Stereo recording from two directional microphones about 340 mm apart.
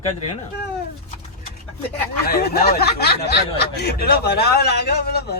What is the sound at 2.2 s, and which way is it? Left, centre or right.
Speech, left.